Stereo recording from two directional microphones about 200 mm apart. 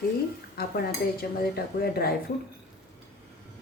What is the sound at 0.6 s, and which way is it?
Speech, 50° left (ahead or behind).